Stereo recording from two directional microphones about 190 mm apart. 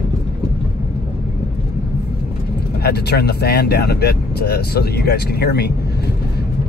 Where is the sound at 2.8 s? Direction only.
60° left (ahead or behind).